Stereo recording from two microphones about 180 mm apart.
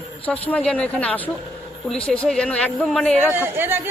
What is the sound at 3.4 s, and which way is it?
Speech, 10° right (ahead or behind).